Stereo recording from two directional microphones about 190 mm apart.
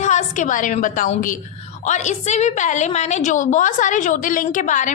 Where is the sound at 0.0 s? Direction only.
40° left (ahead or behind).